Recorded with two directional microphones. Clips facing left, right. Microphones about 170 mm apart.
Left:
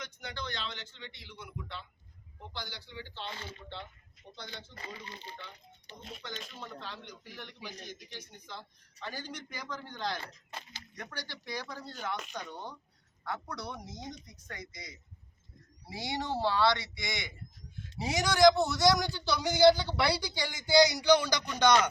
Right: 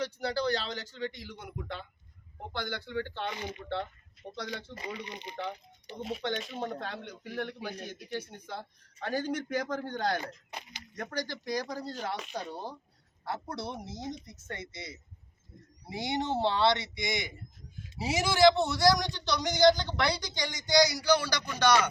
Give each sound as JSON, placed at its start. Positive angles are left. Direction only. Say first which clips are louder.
{"t": 0.0, "sound": "a man's voice", "louder": "right 11 dB", "side_deg": -35}
{"t": 3.3, "sound": "speech", "louder": "right 7 dB", "side_deg": -15}
{"t": 4.4, "sound": "speech", "louder": "right 8 dB", "side_deg": -70}
{"t": 4.9, "sound": "speech", "louder": "right 6 dB", "side_deg": -15}
{"t": 6.5, "sound": "a man's voice", "louder": "right 8 dB", "side_deg": -60}
{"t": 10.5, "sound": "speech", "louder": "right 2 dB", "side_deg": -15}
{"t": 10.9, "sound": "a man's voice", "louder": "right 8 dB", "side_deg": -45}
{"t": 17.9, "sound": "speech", "louder": "right 1 dB", "side_deg": -5}
{"t": 20.8, "sound": "speech", "louder": "left 2 dB", "side_deg": 20}